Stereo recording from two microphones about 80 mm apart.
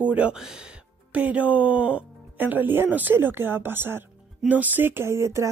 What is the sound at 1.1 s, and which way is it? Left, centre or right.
Speech, centre.